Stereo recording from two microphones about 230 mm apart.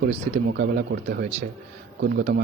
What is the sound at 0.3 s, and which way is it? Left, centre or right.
Speech, right.